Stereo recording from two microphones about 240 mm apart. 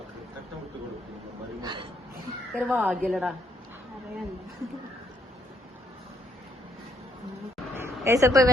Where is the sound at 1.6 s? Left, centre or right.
Centre.